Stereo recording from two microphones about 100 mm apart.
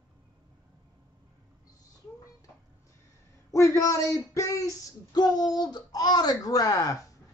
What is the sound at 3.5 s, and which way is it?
A man's voice, 30° left (ahead or behind).